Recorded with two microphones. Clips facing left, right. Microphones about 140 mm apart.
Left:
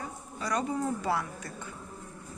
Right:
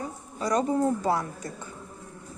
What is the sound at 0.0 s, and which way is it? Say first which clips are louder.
A woman's voice: right 5 dB; 40° right (ahead or behind).